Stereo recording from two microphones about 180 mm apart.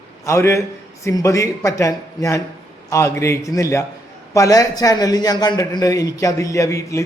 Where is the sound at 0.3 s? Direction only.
15° left (ahead or behind).